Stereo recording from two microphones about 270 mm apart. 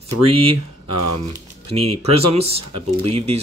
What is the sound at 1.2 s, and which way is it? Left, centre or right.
Speech, right.